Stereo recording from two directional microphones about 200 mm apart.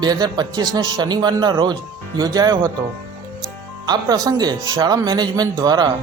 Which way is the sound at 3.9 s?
20° right (ahead or behind).